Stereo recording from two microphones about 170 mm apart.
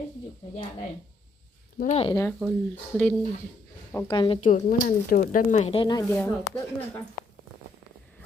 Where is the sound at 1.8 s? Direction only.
40° left (ahead or behind).